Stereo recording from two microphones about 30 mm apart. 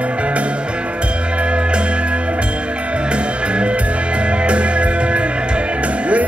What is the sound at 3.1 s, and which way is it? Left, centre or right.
Music, right.